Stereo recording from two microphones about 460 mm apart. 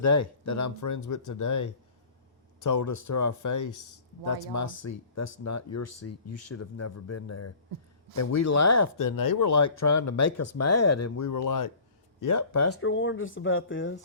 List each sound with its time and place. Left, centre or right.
0.0 s speech: left